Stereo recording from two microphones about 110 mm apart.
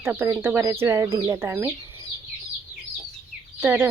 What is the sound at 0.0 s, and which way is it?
Speech, 20° right (ahead or behind).